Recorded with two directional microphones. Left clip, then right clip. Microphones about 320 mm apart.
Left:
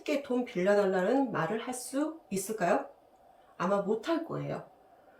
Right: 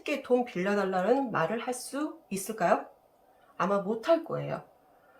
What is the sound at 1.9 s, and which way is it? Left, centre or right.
Speech, centre.